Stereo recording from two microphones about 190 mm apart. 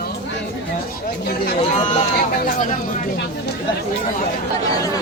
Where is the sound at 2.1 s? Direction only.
45° left (ahead or behind).